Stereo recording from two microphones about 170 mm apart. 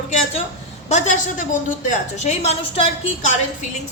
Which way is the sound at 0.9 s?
45° left (ahead or behind).